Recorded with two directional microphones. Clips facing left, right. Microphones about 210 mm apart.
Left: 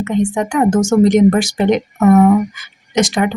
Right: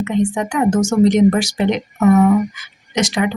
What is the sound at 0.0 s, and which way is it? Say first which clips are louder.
A woman's voice: left 1 dB; 45° left (ahead or behind).